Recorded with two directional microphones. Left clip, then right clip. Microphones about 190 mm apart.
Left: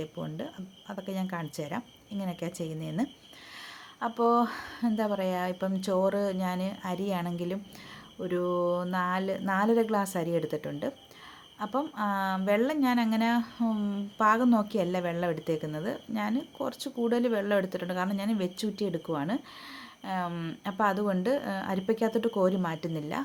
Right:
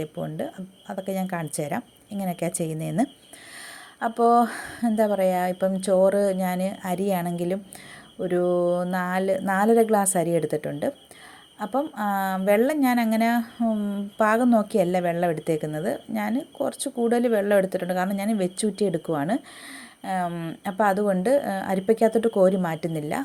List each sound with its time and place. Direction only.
0.0 s a woman's voice: 20° right (ahead or behind)